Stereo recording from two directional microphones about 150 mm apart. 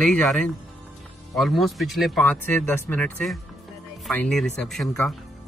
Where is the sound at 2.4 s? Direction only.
15° left (ahead or behind).